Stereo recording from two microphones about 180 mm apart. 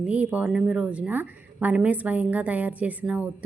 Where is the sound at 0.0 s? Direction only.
10° right (ahead or behind).